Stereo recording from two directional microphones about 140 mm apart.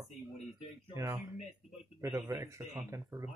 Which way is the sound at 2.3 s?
20° right (ahead or behind).